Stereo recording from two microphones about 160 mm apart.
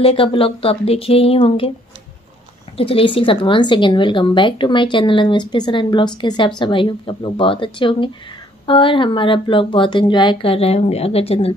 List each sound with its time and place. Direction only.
0.0 s speech: 35° left (ahead or behind)
2.8 s speech: 35° left (ahead or behind)